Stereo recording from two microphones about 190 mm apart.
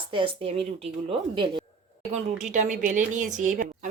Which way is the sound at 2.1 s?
40° right (ahead or behind).